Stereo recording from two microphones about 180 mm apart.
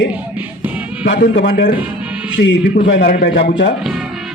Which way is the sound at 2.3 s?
90° left.